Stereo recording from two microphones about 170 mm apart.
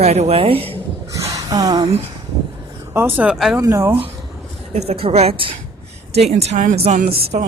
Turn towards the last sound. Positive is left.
turn(degrees=-45)  # may be behind; listen again after turning